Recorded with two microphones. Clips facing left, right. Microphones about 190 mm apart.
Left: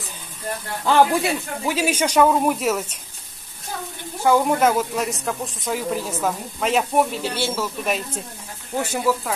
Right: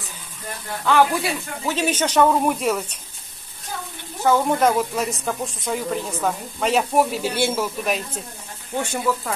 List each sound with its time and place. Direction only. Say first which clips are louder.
0.8 s speech: left 1 dB; 30° left (ahead or behind)
1.7 s speech: even; 10° left (ahead or behind)
4.2 s speech: left 1 dB; 10° left (ahead or behind); by 7.7 s 15° right (ahead or behind)
7.8 s speech: even; centre (ahead or behind)